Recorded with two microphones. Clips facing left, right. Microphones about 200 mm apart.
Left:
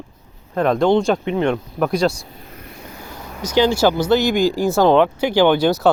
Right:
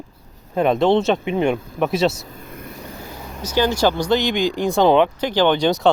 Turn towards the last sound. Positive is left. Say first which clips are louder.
# left 2 dB
turn(degrees=5)  # may be behind; listen again after turning